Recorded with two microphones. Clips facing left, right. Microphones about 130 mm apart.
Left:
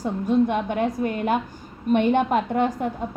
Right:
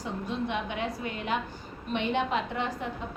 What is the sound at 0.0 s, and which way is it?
A woman's voice, 50° left (ahead or behind).